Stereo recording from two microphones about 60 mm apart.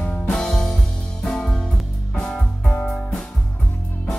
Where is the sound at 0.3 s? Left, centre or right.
Centre.